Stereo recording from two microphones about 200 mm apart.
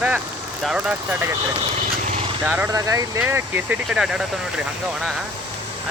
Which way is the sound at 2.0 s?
30° right (ahead or behind).